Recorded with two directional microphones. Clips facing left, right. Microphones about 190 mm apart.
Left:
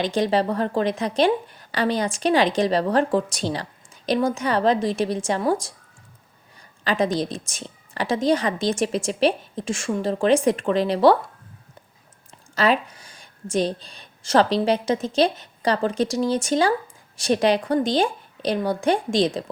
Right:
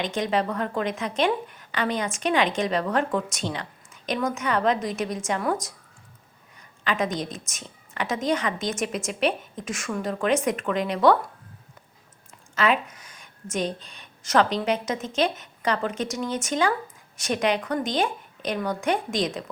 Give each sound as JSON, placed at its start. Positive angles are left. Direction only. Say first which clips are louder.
{"t": 0.0, "sound": "a woman's voice", "louder": "left 4 dB", "side_deg": 35}
{"t": 12.5, "sound": "a woman's voice", "louder": "left 3 dB", "side_deg": 35}